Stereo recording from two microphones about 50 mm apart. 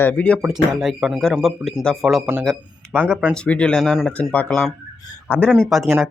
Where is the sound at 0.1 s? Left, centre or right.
Left.